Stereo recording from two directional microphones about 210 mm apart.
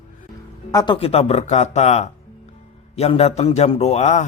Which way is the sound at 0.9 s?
30° left (ahead or behind).